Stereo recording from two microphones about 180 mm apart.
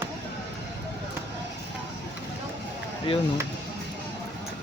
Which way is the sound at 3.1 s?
30° left (ahead or behind).